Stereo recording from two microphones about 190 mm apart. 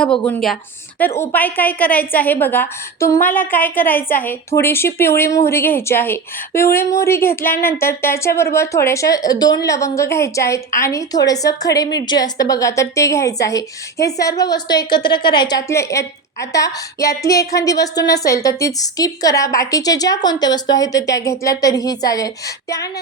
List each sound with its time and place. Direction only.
0.3 s a woman's voice: 5° left (ahead or behind)